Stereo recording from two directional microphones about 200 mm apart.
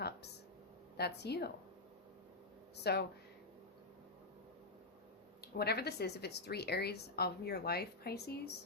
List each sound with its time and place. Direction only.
0.9 s speech: 55° left (ahead or behind)
2.7 s speech: 55° left (ahead or behind)
5.4 s a woman's voice: 55° left (ahead or behind)